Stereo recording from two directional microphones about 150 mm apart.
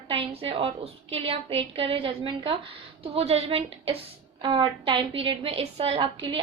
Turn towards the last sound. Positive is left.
turn(degrees=-35)  # may be behind; listen again after turning